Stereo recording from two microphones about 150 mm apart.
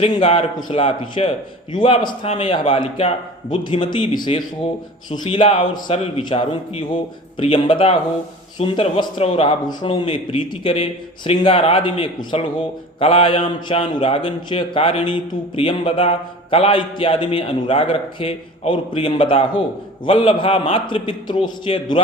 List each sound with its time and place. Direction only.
0.1 s a man's voice: 35° left (ahead or behind)